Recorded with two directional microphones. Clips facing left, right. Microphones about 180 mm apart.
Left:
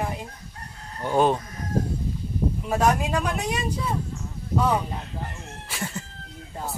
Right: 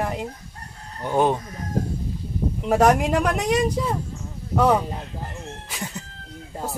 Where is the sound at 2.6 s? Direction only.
75° right (ahead or behind).